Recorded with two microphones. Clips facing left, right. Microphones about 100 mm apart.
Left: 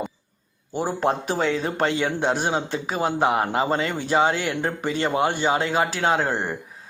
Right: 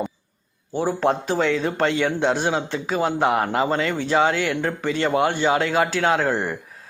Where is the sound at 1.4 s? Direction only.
35° left (ahead or behind).